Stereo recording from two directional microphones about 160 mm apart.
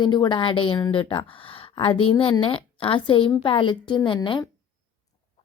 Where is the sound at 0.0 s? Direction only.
30° left (ahead or behind).